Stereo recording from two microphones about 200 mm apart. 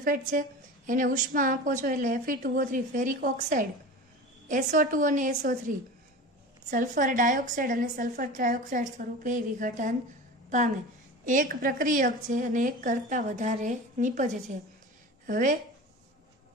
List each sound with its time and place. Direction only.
0.0 s a woman's voice: 45° right (ahead or behind)
11.3 s a woman's voice: 45° right (ahead or behind)